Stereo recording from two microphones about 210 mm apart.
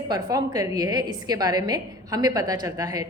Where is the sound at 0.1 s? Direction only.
15° right (ahead or behind).